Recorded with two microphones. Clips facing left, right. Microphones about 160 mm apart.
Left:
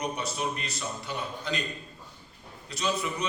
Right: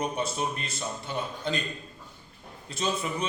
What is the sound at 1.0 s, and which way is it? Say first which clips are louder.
Speech: right 3 dB; 25° right (ahead or behind).